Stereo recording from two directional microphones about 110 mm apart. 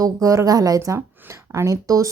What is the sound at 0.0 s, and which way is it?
A woman's voice, 30° right (ahead or behind).